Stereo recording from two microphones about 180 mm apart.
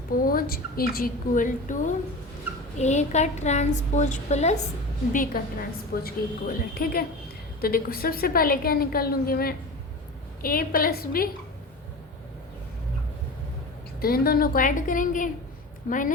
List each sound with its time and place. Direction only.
0.2 s a woman's voice: 55° left (ahead or behind)
5.1 s a woman's voice: 50° left (ahead or behind)
14.0 s a woman's voice: 55° left (ahead or behind)